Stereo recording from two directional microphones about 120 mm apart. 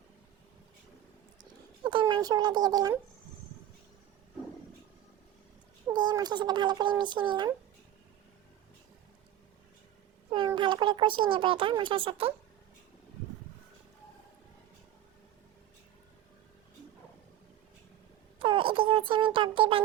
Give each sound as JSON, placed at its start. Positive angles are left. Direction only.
{"t": 1.8, "sound": "speech", "side_deg": -40}
{"t": 5.9, "sound": "speech", "side_deg": -35}
{"t": 10.2, "sound": "a child's voice", "side_deg": -45}
{"t": 18.3, "sound": "speech", "side_deg": -45}